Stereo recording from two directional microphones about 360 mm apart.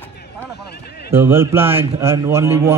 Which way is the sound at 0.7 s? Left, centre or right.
Left.